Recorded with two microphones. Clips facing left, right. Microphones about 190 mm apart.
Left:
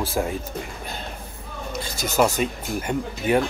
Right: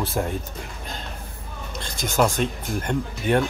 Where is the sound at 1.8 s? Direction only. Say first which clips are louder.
Left 1 dB; 5° left (ahead or behind).